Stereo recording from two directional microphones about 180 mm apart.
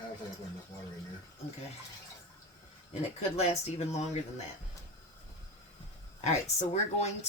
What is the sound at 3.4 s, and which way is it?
Speech, 35° left (ahead or behind).